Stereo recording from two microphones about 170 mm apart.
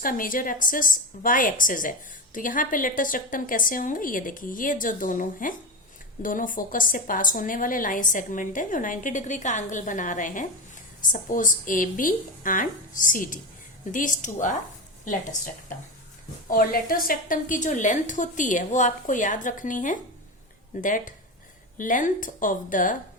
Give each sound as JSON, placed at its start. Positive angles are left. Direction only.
{"t": 0.0, "sound": "a woman's voice", "side_deg": 55}
{"t": 16.5, "sound": "a woman's voice", "side_deg": 55}